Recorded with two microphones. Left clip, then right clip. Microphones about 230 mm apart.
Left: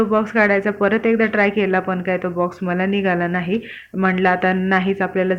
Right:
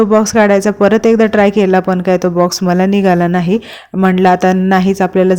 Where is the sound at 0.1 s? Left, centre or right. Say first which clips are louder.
Right 7 dB; right.